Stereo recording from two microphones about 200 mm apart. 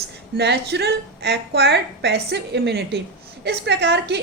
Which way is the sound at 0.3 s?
55° right (ahead or behind).